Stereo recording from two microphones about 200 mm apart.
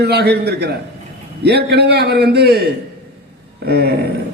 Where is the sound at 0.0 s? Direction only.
55° right (ahead or behind).